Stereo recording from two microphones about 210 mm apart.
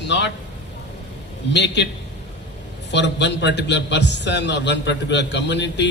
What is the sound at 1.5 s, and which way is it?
Speech, 55° left (ahead or behind).